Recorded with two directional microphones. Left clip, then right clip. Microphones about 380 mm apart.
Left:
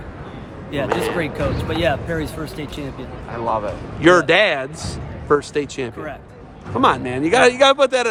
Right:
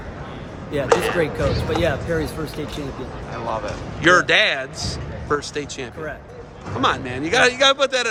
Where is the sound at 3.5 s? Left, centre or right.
Centre.